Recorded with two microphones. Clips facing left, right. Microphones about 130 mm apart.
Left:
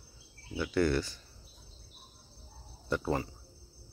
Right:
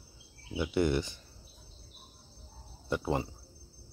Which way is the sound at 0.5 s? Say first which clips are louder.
Even; 20° right (ahead or behind).